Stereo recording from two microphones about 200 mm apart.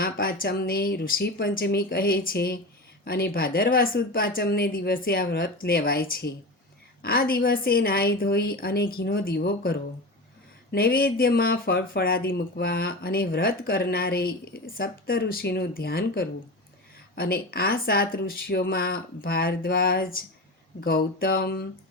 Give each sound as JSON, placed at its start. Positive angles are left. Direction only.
{"t": 0.0, "sound": "speech", "side_deg": 45}